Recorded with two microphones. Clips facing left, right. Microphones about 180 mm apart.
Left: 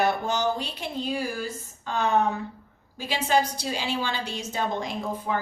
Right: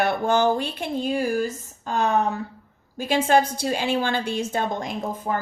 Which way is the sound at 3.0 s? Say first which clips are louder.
Right 5 dB; 50° right (ahead or behind).